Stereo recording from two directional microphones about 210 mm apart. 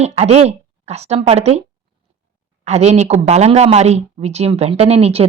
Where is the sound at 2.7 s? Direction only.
30° right (ahead or behind).